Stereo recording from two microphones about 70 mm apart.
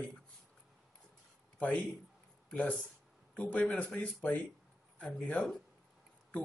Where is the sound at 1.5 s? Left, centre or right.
Left.